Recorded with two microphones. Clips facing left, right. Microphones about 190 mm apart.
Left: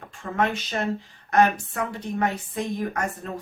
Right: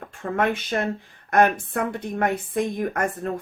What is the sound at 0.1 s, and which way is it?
A woman's voice, 55° right (ahead or behind).